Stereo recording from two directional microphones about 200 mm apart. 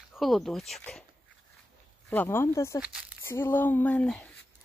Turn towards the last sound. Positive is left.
turn(degrees=5)  # may be behind; listen again after turning